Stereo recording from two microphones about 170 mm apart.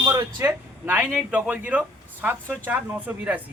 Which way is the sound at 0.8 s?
10° right (ahead or behind).